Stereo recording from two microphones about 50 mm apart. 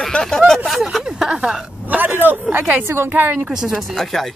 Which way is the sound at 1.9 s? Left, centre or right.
Right.